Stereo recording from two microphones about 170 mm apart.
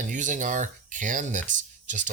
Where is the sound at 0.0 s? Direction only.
50° right (ahead or behind).